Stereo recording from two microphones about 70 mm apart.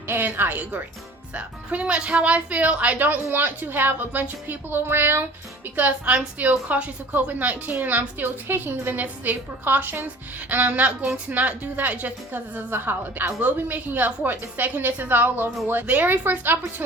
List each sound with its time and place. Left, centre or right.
0.1 s a woman's voice: right
5.7 s a woman's voice: right